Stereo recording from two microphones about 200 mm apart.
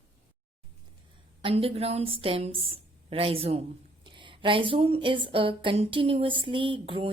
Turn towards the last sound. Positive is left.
turn(degrees=-25)  # may be behind; listen again after turning